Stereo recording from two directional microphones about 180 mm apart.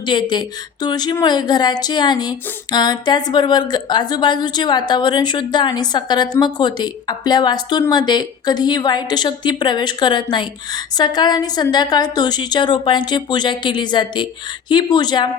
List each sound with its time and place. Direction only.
0.0 s a woman's voice: 25° left (ahead or behind)